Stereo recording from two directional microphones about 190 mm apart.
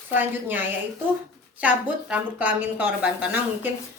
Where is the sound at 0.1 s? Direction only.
10° right (ahead or behind).